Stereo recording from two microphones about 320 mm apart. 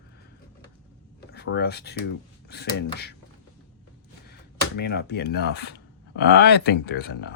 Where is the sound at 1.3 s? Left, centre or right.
Left.